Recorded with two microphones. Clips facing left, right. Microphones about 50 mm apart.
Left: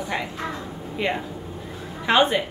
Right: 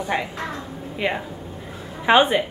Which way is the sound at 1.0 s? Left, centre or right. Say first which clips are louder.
Right 2 dB; centre.